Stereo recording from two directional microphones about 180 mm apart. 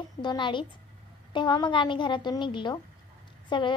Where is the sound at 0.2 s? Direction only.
25° left (ahead or behind).